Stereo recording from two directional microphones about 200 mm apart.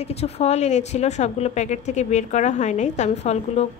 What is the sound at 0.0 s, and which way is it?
Speech, 30° left (ahead or behind).